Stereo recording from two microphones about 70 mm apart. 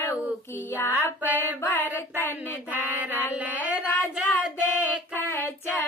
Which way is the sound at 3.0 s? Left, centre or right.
Right.